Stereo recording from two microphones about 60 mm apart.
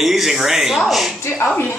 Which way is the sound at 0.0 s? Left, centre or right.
Centre.